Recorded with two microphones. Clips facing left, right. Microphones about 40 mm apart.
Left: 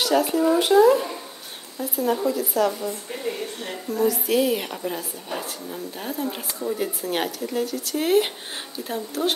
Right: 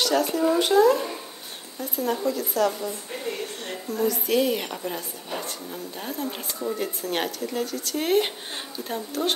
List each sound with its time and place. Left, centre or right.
0.0 s a woman's voice: centre